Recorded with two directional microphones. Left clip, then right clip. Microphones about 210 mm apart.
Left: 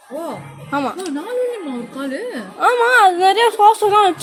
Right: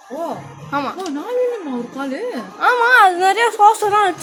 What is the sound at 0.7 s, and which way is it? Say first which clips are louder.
Speech: left 1 dB; 35° left (ahead or behind).